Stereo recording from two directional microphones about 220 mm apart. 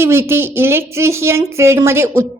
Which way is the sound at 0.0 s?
10° right (ahead or behind).